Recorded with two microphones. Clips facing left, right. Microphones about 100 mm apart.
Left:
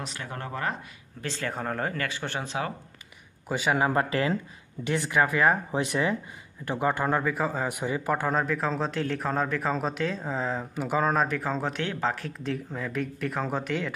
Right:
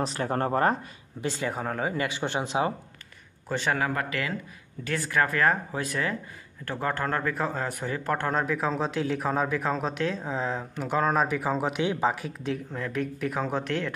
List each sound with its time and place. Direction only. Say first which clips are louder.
0.0 s speech: right 9 dB; 40° right (ahead or behind)
1.2 s speech: right 2 dB; 15° right (ahead or behind)
2.0 s speech: right 3 dB; 20° right (ahead or behind)
3.4 s speech: left 1 dB; 10° left (ahead or behind)
3.7 s speech: left 4 dB; 25° left (ahead or behind)
4.8 s a man's voice: left 1 dB; 20° left (ahead or behind); by 13.9 s centre (ahead or behind)